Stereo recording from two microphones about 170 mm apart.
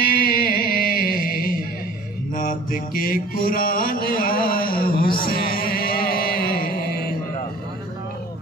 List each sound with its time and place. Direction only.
0.0 s music: 60° left (ahead or behind)
2.3 s mantra: 55° left (ahead or behind)
5.2 s music: 60° left (ahead or behind)